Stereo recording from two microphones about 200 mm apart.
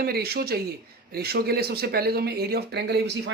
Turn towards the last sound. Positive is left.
turn(degrees=-55)  # may be behind; listen again after turning